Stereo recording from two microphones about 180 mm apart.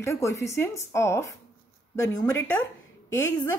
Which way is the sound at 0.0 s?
15° left (ahead or behind).